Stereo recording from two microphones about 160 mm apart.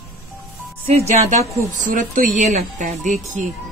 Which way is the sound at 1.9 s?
55° right (ahead or behind).